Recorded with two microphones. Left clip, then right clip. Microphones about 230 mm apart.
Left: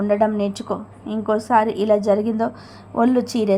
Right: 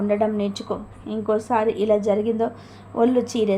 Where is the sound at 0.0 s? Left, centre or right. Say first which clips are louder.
Left 3 dB; centre.